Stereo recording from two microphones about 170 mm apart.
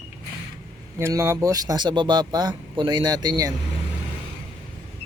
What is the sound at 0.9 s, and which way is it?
Speech, 15° right (ahead or behind).